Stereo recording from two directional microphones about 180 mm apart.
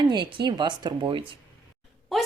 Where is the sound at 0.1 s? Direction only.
25° right (ahead or behind).